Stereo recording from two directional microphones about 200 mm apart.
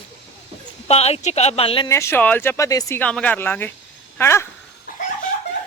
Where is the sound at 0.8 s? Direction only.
30° left (ahead or behind).